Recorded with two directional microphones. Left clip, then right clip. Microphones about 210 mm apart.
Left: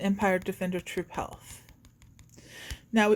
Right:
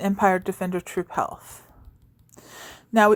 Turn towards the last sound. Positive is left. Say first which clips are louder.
# right 7 dB
turn(degrees=-25)  # may be behind; listen again after turning